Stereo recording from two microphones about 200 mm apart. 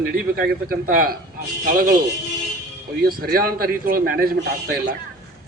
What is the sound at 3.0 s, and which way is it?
A man's voice, 50° right (ahead or behind).